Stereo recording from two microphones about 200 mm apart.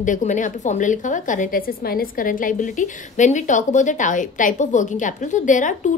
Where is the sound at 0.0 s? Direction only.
40° left (ahead or behind).